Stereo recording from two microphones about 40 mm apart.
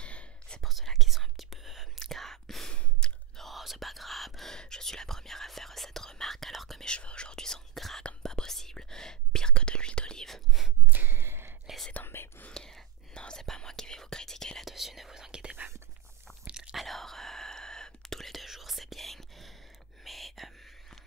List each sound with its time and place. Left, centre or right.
0.0 s whispering: left
0.7 s whispering: centre
2.0 s whispering: centre
2.7 s sigh: left
3.3 s whispering: centre
4.6 s whispering: centre
7.0 s whispering: left
10.2 s whispering: centre
10.9 s gasp: right
12.0 s whispering: left
12.5 s whispering: centre
14.6 s whispering: centre
16.7 s whispering: centre